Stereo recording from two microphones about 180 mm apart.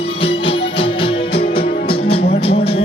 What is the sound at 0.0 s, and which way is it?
Music, 30° left (ahead or behind).